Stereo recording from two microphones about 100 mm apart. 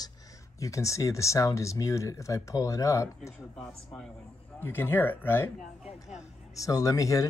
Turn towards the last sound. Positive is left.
turn(degrees=35)  # may be behind; listen again after turning